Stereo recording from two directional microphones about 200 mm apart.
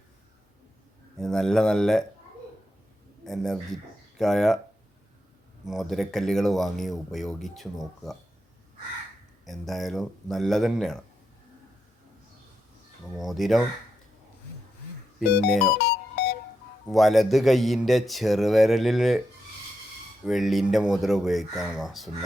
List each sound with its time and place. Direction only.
1.2 s speech: 5° left (ahead or behind)
3.2 s speech: centre (ahead or behind)
5.6 s speech: centre (ahead or behind)
9.5 s speech: centre (ahead or behind)
13.1 s speech: centre (ahead or behind)
15.4 s speech: centre (ahead or behind)
15.8 s music: 50° left (ahead or behind)
16.8 s speech: centre (ahead or behind)
20.2 s speech: centre (ahead or behind)